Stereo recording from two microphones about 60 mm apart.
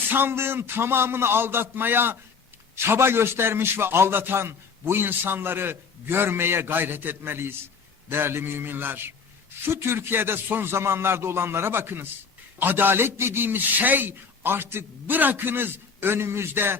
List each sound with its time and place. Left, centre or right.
0.1 s a man's voice: right